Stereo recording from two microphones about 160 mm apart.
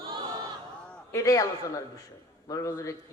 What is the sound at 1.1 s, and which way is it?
A man's voice, 20° left (ahead or behind).